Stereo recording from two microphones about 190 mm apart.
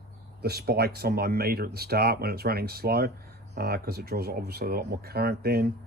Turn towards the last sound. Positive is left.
turn(degrees=-55)  # may be behind; listen again after turning